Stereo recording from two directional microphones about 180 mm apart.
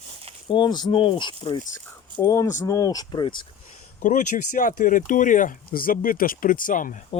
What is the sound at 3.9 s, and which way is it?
Speech, 45° left (ahead or behind).